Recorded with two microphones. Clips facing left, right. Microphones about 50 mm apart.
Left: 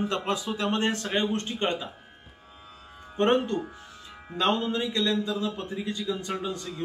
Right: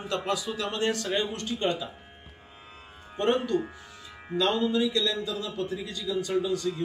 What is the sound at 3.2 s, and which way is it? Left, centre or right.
A man's voice, left.